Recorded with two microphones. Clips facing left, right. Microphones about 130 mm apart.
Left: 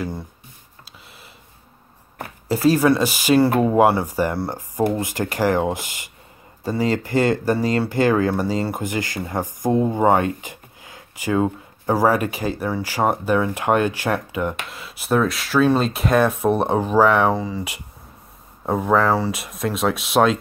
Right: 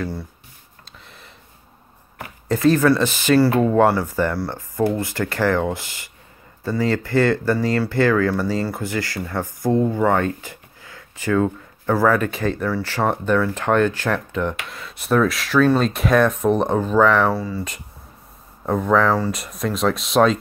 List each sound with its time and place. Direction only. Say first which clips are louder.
0.0 s speech: right 1 dB; 20° left (ahead or behind)
2.4 s speech: even; 5° left (ahead or behind)